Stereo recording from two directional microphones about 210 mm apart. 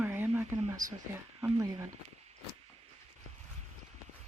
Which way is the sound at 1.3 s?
10° right (ahead or behind).